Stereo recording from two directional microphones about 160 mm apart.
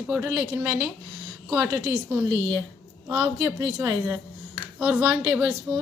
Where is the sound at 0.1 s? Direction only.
10° right (ahead or behind).